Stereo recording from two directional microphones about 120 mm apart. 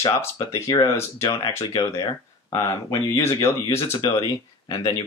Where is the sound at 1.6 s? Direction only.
40° left (ahead or behind).